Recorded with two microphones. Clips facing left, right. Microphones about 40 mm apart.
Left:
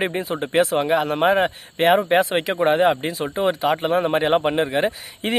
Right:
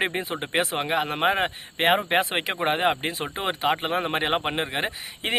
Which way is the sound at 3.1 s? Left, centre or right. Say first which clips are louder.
Left 5 dB; right.